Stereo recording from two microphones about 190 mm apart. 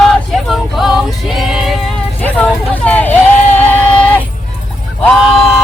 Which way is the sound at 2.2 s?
10° left (ahead or behind).